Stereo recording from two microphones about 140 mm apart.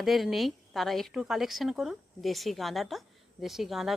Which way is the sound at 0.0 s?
Centre (ahead or behind).